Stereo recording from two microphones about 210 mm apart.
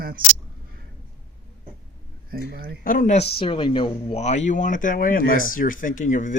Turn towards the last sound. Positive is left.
turn(degrees=35)  # may be behind; listen again after turning